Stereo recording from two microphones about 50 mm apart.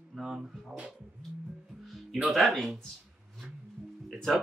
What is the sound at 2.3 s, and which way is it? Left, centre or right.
Speech, centre.